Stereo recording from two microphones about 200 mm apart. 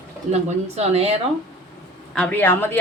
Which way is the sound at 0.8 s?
30° right (ahead or behind).